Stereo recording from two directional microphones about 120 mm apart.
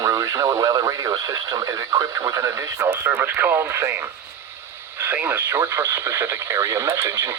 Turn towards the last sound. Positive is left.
turn(degrees=-25)  # may be behind; listen again after turning